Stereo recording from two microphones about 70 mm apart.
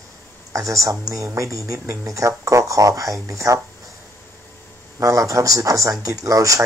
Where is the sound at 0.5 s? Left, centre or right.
Right.